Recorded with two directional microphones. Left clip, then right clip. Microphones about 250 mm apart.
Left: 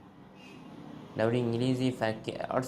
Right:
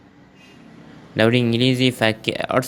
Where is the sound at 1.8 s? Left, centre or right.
Right.